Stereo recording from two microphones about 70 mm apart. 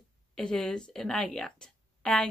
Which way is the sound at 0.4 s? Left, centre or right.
Centre.